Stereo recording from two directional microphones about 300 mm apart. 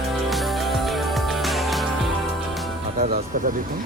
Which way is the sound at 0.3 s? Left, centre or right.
Centre.